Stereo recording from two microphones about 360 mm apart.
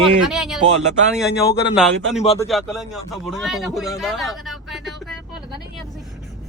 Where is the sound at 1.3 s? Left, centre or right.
Left.